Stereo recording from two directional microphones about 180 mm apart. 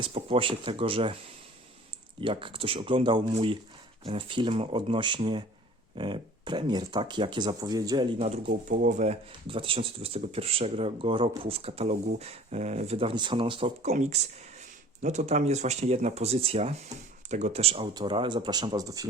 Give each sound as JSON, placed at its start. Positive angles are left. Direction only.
{"t": 0.0, "sound": "speech", "side_deg": -30}
{"t": 2.2, "sound": "speech", "side_deg": -30}
{"t": 8.4, "sound": "speech", "side_deg": -60}
{"t": 8.9, "sound": "speech", "side_deg": -40}